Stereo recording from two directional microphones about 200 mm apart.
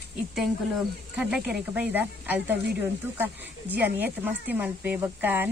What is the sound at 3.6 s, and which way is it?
Speech, 10° right (ahead or behind).